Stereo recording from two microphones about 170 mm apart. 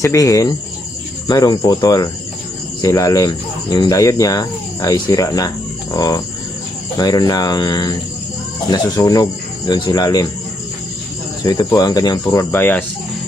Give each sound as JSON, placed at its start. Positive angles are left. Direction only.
{"t": 0.0, "sound": "speech", "side_deg": 20}
{"t": 11.4, "sound": "speech", "side_deg": 25}